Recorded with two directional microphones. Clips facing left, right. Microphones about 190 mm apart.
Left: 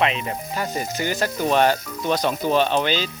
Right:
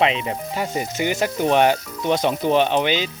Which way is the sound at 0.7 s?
20° right (ahead or behind).